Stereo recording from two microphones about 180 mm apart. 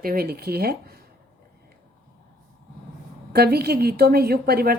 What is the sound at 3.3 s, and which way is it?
A woman's voice, 60° right (ahead or behind).